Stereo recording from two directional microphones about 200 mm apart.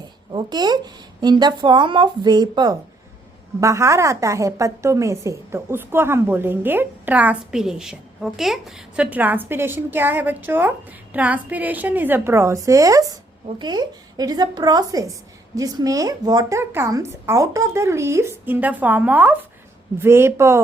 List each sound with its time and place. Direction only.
0.3 s a woman's voice: 20° right (ahead or behind)